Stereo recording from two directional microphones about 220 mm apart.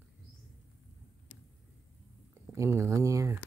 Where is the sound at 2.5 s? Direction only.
15° right (ahead or behind).